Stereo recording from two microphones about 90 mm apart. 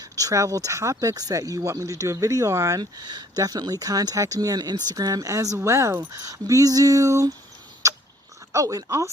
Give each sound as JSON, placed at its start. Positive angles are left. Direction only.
{"t": 0.0, "sound": "speech", "side_deg": -40}
{"t": 7.8, "sound": "a sound", "side_deg": -35}
{"t": 8.5, "sound": "speech", "side_deg": -40}